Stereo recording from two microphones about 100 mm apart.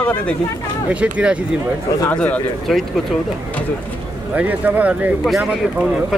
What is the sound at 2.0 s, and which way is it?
Speech, 15° left (ahead or behind).